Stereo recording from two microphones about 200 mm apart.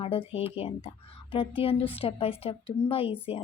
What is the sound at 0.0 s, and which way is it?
A woman's voice, 25° left (ahead or behind).